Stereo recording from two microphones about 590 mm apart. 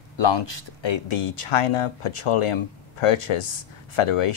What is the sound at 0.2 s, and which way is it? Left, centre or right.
Speech, left.